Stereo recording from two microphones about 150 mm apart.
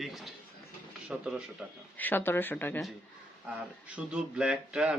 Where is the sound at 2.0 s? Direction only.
10° left (ahead or behind).